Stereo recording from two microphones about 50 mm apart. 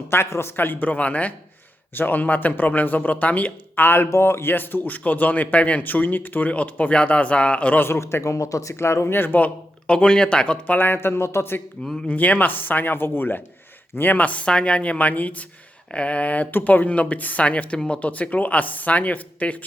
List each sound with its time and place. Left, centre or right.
0.1 s speech: left
0.5 s a man's voice: left
0.9 s speech: left
2.0 s a man's voice: left
3.8 s speech: left
4.1 s speech: left
4.5 s a man's voice: left
7.9 s speech: left
9.0 s speech: left
9.4 s speech: centre
10.9 s speech: left
12.0 s a man's voice: left